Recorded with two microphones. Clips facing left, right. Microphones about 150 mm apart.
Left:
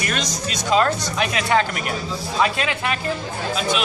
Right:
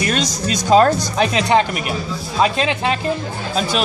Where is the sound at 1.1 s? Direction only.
25° right (ahead or behind).